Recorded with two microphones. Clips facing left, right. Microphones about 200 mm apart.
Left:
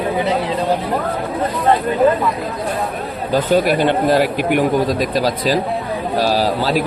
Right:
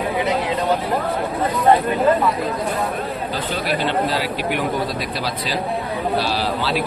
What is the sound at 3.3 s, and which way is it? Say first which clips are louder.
Speech: left 11 dB; 45° left (ahead or behind).